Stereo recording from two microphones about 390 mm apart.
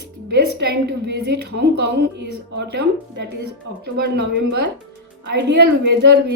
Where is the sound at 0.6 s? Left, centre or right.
Right.